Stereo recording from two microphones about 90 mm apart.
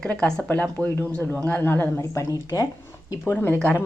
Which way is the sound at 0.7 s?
20° left (ahead or behind).